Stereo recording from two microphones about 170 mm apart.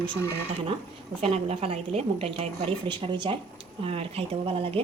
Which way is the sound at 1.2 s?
35° right (ahead or behind).